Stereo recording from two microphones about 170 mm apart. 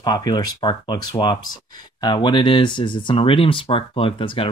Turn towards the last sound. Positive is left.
turn(degrees=35)  # may be behind; listen again after turning